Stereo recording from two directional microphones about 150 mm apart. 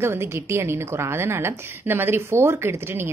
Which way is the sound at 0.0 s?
15° right (ahead or behind).